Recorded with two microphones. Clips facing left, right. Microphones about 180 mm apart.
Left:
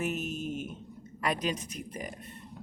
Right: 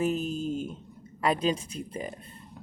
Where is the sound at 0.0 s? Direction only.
30° right (ahead or behind).